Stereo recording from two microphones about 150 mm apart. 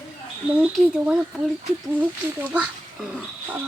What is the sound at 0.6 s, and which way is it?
Speech, 5° right (ahead or behind).